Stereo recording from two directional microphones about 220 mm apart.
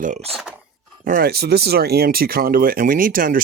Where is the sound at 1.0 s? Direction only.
40° right (ahead or behind).